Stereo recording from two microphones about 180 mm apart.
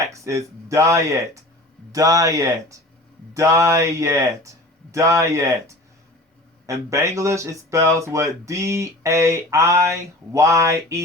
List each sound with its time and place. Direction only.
0.0 s speech: 15° right (ahead or behind)